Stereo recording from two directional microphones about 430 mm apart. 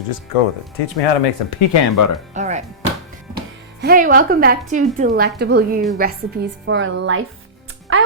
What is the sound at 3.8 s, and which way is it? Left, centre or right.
A woman's voice, centre.